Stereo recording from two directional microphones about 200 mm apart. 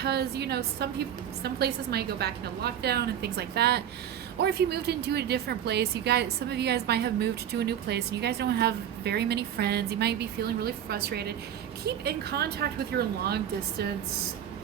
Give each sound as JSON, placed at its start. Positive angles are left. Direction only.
{"t": 0.0, "sound": "a woman's voice", "side_deg": -55}